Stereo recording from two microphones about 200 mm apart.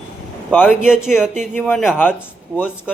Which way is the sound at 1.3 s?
35° right (ahead or behind).